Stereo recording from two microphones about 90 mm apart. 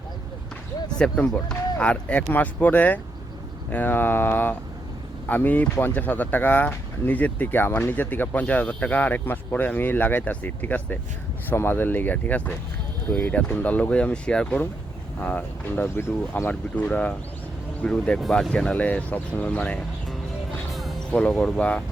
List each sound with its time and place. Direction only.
0.9 s speech: 5° left (ahead or behind)
21.1 s speech: 15° left (ahead or behind)